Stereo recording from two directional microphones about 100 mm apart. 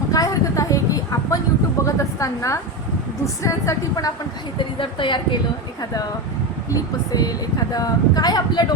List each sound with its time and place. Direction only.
0.1 s a sound: 35° left (ahead or behind)
3.4 s speech: 35° left (ahead or behind)
4.5 s speech: 55° left (ahead or behind)
5.8 s speech: 40° left (ahead or behind)
7.1 s speech: 40° left (ahead or behind)